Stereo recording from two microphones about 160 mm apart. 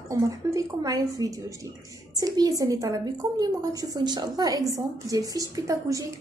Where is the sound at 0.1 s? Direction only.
20° right (ahead or behind).